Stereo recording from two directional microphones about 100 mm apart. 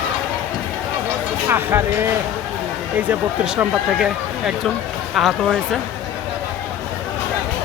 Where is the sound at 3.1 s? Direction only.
15° right (ahead or behind).